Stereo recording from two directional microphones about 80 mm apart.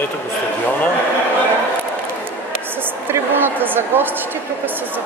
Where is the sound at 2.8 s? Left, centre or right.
Right.